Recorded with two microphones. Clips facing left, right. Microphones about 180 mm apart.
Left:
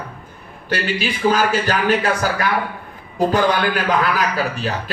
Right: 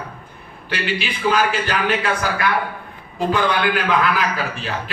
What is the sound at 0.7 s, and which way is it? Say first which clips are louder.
Speech: left 3 dB; 40° left (ahead or behind).